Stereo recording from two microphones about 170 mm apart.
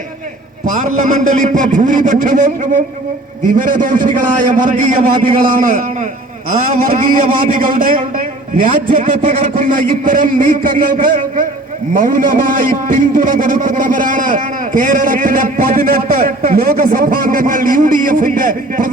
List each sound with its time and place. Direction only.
0.7 s a man's voice: 50° right (ahead or behind)